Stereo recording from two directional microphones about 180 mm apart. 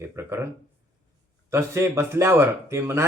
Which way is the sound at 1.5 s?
15° right (ahead or behind).